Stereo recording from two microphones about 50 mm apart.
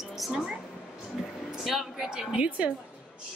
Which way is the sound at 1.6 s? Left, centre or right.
Centre.